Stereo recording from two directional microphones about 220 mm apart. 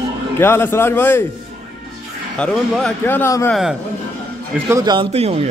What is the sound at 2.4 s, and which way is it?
Speech, 5° left (ahead or behind).